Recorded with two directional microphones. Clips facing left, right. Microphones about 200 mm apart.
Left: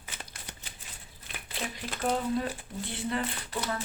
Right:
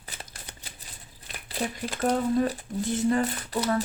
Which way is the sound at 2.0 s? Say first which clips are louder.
Right 5 dB; 40° right (ahead or behind).